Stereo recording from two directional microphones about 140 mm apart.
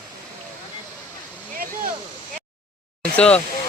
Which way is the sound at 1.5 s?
90° right.